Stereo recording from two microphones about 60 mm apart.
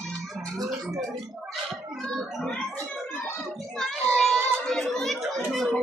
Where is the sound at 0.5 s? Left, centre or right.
Right.